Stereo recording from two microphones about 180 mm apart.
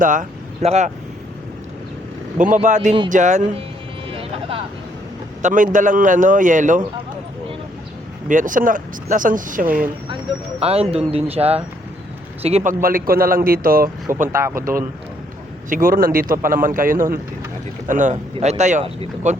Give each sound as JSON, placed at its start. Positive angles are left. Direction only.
{"t": 0.0, "sound": "speech", "side_deg": -45}
{"t": 2.4, "sound": "speech", "side_deg": -45}
{"t": 4.1, "sound": "vehicle", "side_deg": -30}
{"t": 5.4, "sound": "speech", "side_deg": -45}
{"t": 8.3, "sound": "speech", "side_deg": -45}
{"t": 10.6, "sound": "speech", "side_deg": -35}
{"t": 12.8, "sound": "speech", "side_deg": -55}
{"t": 14.3, "sound": "speech", "side_deg": -15}
{"t": 15.7, "sound": "speech", "side_deg": -50}